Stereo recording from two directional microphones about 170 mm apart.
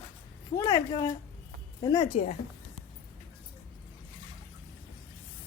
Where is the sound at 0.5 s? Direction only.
20° left (ahead or behind).